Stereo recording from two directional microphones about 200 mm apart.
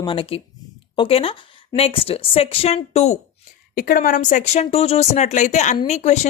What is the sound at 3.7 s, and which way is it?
Speech, 45° left (ahead or behind).